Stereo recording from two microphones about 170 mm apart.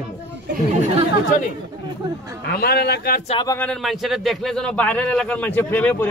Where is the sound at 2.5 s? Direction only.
65° left (ahead or behind).